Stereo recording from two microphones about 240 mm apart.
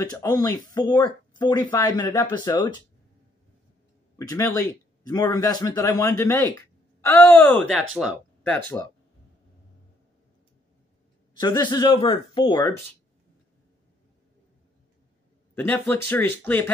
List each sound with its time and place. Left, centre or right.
0.0 s speech: centre
4.2 s speech: centre
11.3 s speech: centre
15.5 s speech: centre